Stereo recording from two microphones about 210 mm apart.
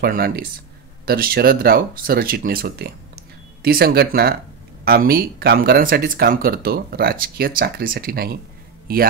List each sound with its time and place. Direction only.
0.0 s speech: 45° right (ahead or behind)